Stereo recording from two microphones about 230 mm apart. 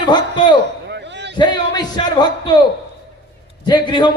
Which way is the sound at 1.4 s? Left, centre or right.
Centre.